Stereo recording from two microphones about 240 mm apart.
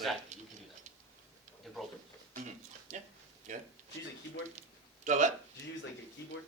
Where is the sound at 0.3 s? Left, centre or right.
Right.